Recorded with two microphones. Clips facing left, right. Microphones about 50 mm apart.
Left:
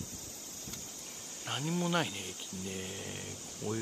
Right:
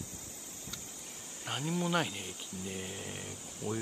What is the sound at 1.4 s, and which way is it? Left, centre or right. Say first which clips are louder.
Speech: even; centre.